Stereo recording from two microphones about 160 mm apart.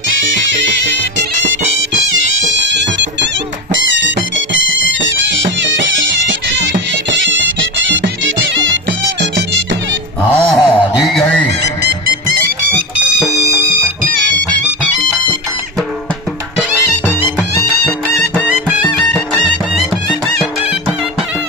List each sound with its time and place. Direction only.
2.6 s music: 90° right
10.3 s a sound: centre (ahead or behind)
17.8 s music: 5° left (ahead or behind)